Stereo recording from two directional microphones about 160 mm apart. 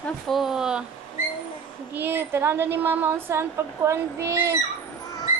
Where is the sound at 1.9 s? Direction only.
15° right (ahead or behind).